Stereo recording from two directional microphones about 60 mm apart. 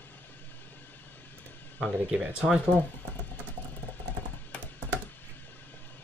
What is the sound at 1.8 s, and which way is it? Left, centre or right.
Speech, centre.